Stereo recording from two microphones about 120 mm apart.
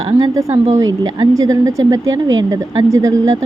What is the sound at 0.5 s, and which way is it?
Speech, 65° right (ahead or behind).